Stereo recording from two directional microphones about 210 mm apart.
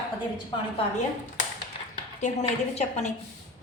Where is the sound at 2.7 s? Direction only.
30° left (ahead or behind).